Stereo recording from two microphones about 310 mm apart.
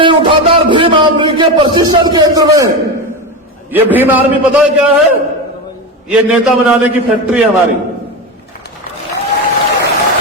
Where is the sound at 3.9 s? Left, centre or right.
Centre.